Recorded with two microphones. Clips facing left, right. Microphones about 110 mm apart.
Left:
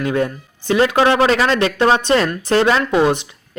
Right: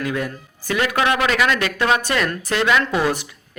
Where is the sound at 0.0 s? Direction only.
30° left (ahead or behind).